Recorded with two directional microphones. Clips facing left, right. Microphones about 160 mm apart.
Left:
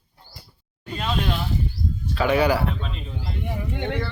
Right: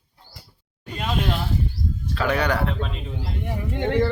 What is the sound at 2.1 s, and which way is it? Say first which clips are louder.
Speech: left 3 dB; 5° left (ahead or behind).